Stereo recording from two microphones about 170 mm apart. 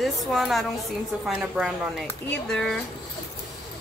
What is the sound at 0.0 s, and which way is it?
Speech, centre (ahead or behind).